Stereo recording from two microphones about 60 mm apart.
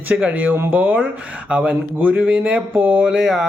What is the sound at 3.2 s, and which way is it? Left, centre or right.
Speech, centre.